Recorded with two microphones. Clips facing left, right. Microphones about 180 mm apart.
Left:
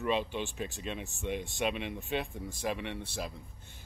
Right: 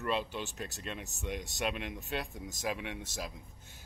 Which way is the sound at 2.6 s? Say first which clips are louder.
Left 2 dB; 5° right (ahead or behind).